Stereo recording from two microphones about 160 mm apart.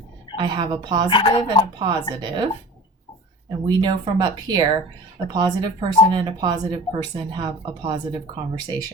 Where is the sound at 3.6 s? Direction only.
30° right (ahead or behind).